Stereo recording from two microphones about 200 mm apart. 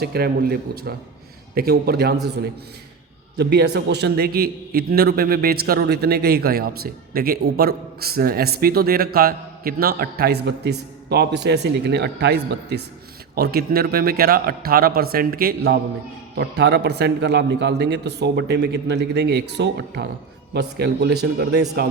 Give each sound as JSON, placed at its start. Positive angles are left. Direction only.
{"t": 0.0, "sound": "a man's voice", "side_deg": -50}
{"t": 3.3, "sound": "a man's voice", "side_deg": -55}